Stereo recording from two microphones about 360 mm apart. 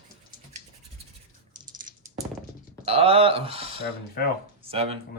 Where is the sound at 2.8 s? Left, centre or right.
Centre.